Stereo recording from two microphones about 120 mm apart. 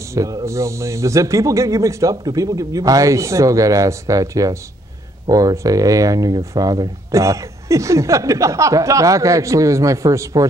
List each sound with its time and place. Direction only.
0.1 s speech: 25° right (ahead or behind)